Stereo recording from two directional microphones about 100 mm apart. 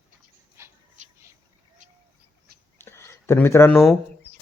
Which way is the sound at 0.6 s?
25° right (ahead or behind).